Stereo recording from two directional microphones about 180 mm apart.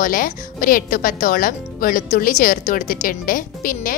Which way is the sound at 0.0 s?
50° left (ahead or behind).